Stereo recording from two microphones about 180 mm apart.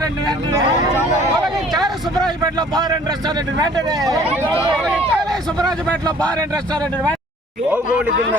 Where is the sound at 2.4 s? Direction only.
20° right (ahead or behind).